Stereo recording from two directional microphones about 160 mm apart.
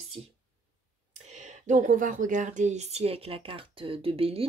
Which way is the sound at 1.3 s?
50° right (ahead or behind).